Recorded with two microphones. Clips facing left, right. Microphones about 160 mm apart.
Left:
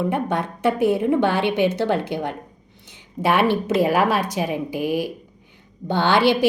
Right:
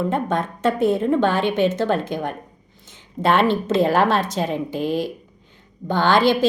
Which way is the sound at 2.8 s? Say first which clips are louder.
Right 1 dB; 15° left (ahead or behind).